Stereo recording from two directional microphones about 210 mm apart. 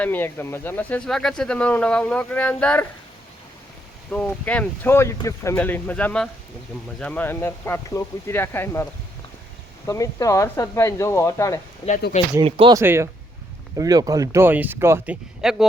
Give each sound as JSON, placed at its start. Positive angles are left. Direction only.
{"t": 0.0, "sound": "speech", "side_deg": 10}
{"t": 4.1, "sound": "speech", "side_deg": 5}
{"t": 12.3, "sound": "speech", "side_deg": -25}
{"t": 12.7, "sound": "speech", "side_deg": -10}